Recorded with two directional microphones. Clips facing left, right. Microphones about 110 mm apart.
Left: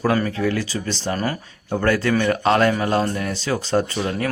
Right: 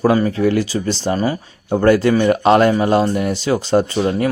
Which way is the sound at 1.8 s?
25° right (ahead or behind).